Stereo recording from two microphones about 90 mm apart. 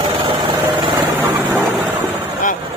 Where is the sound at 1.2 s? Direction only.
20° right (ahead or behind).